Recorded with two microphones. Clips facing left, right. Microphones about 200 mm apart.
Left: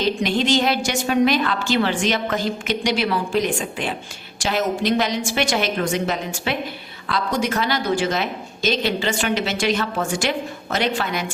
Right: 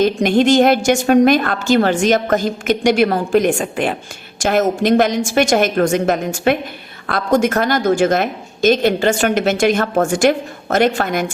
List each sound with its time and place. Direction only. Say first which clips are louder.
0.0 s a woman's voice: right 7 dB; 50° right (ahead or behind)